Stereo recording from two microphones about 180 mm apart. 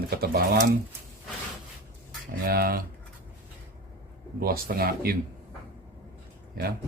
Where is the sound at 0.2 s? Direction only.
60° right (ahead or behind).